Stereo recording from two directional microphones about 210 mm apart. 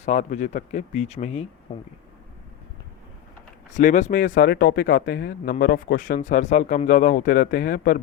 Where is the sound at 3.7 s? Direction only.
35° left (ahead or behind).